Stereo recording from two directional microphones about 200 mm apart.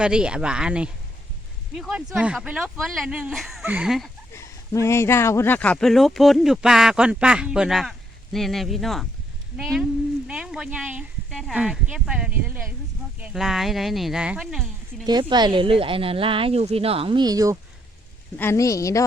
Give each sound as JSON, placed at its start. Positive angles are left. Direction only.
{"t": 0.0, "sound": "speech", "side_deg": -5}
{"t": 4.4, "sound": "speech", "side_deg": 15}
{"t": 15.0, "sound": "speech", "side_deg": -20}
{"t": 18.3, "sound": "speech", "side_deg": 15}